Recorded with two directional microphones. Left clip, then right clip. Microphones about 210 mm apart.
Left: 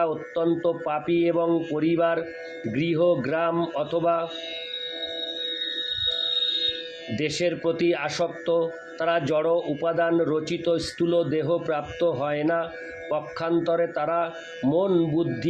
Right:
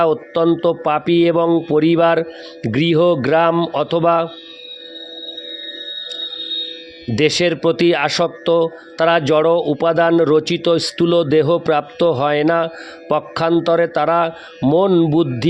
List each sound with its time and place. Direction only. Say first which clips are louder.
0.0 s a man's voice: right 9 dB; 50° right (ahead or behind)
7.2 s a man's voice: right 11 dB; 50° right (ahead or behind)